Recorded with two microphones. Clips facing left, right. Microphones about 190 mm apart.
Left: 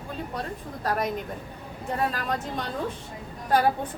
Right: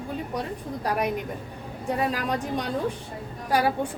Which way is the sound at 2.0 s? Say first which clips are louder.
Right 1 dB; 15° right (ahead or behind).